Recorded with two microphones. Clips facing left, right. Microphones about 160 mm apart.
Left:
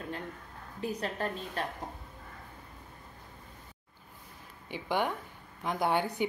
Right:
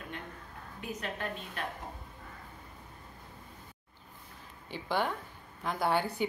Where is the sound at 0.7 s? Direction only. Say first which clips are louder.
Left 5 dB; 35° left (ahead or behind).